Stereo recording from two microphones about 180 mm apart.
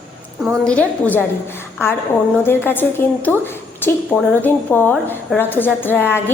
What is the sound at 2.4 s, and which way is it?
A woman's voice, 10° left (ahead or behind).